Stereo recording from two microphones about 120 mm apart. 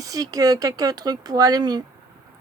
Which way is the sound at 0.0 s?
30° right (ahead or behind).